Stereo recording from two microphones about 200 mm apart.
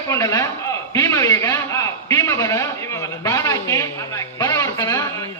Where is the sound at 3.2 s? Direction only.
15° left (ahead or behind).